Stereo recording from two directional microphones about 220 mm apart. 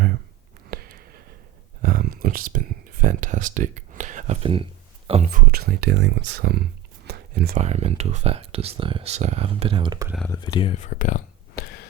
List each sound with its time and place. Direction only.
0.7 s a sound: 45° right (ahead or behind)
5.0 s speech: 30° right (ahead or behind)
7.6 s speech: 30° right (ahead or behind)
10.2 s speech: 10° left (ahead or behind)
10.4 s speech: 20° left (ahead or behind)
10.8 s a sound: 35° left (ahead or behind)